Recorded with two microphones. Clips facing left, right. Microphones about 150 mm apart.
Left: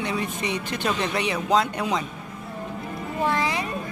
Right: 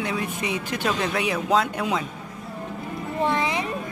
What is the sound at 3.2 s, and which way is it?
Music, 20° right (ahead or behind).